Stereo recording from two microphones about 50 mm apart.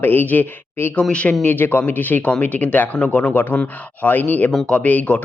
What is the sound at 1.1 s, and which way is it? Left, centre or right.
Speech, left.